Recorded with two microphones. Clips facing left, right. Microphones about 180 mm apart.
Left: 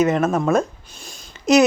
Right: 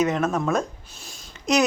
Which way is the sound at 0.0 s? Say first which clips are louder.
Left 4 dB; 5° left (ahead or behind).